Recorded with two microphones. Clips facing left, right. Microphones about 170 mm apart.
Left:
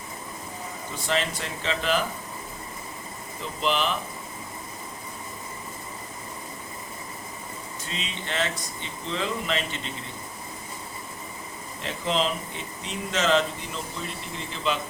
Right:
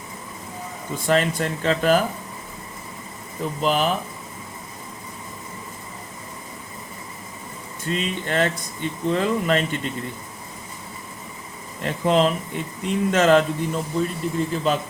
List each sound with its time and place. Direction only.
0.9 s speech: 50° right (ahead or behind)
3.6 s speech: 45° right (ahead or behind)
7.9 s speech: 50° right (ahead or behind)
11.8 s speech: 50° right (ahead or behind)